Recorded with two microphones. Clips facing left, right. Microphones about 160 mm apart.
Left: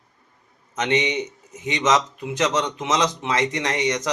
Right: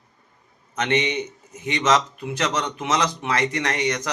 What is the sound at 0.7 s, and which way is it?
A man's voice, 20° left (ahead or behind).